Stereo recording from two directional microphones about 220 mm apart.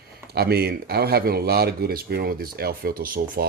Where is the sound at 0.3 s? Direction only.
45° right (ahead or behind).